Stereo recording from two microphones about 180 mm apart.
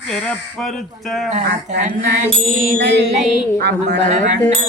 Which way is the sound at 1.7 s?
40° right (ahead or behind).